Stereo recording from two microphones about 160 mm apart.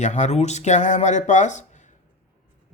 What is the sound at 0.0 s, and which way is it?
Speech, 45° left (ahead or behind).